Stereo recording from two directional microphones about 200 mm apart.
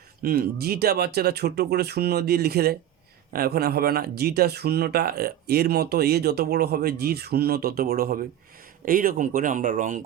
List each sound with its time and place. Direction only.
0.2 s speech: 50° right (ahead or behind)